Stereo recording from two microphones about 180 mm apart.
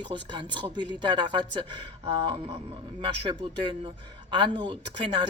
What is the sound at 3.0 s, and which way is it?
Speech, 25° right (ahead or behind).